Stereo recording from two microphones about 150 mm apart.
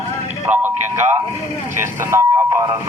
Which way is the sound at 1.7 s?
15° right (ahead or behind).